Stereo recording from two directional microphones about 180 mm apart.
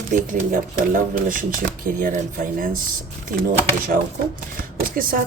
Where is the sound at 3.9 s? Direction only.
55° right (ahead or behind).